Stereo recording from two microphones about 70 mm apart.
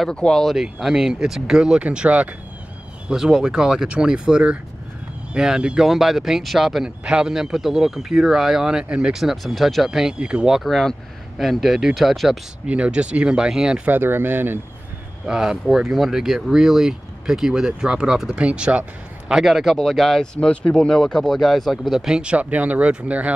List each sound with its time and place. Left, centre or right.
0.1 s speech: centre
0.4 s speech: centre
3.1 s speech: centre
9.1 s speech: centre
10.6 s speech: centre
12.6 s speech: centre
13.8 s speech: right
15.2 s speech: centre
19.3 s speech: centre
20.3 s speech: centre; by 23.3 s right